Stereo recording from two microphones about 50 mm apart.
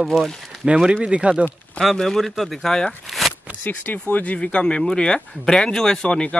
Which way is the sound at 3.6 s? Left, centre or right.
Left.